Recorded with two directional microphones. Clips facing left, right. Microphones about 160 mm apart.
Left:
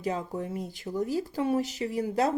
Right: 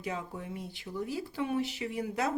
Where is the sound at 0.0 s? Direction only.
35° left (ahead or behind).